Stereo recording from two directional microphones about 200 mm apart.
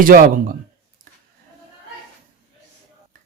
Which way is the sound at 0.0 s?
45° right (ahead or behind).